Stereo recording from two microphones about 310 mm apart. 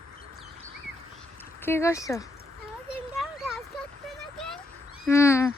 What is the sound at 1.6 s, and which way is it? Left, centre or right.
Speech, centre.